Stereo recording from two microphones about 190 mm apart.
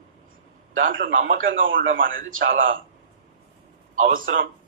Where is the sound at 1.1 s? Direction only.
90° right.